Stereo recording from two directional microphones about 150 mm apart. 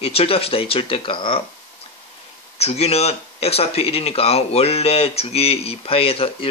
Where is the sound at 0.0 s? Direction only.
40° left (ahead or behind).